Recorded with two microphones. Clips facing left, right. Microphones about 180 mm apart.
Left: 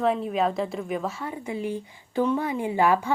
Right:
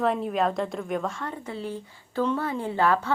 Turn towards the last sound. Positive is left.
turn(degrees=15)  # may be behind; listen again after turning